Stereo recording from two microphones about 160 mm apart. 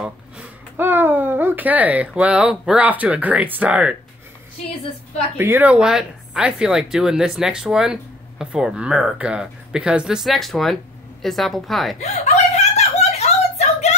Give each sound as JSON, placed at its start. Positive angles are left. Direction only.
{"t": 0.0, "sound": "speech", "side_deg": -10}
{"t": 5.4, "sound": "speech", "side_deg": -10}
{"t": 12.0, "sound": "a sound", "side_deg": 45}